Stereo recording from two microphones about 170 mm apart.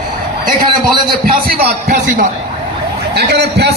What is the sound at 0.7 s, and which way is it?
A man's voice, 25° right (ahead or behind).